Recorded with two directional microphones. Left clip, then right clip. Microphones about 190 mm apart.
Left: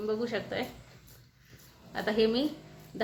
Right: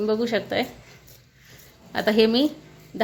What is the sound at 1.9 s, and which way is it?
Speech, 55° right (ahead or behind).